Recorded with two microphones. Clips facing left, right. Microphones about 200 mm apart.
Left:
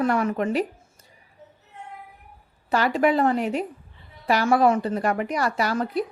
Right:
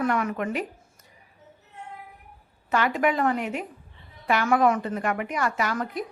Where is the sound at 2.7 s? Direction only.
35° left (ahead or behind).